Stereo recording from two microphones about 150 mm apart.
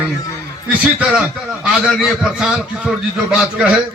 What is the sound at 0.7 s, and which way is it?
A man's voice, 10° right (ahead or behind).